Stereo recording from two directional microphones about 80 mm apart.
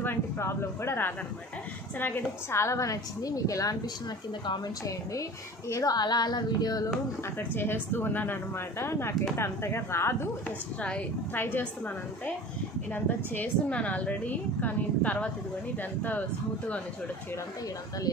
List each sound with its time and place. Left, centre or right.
0.0 s a woman's voice: left
5.7 s speech: left
5.9 s a sound: left
7.5 s a woman's voice: left
10.8 s a woman's voice: centre
12.9 s a woman's voice: left